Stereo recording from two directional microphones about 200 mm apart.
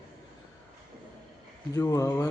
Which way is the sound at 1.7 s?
15° left (ahead or behind).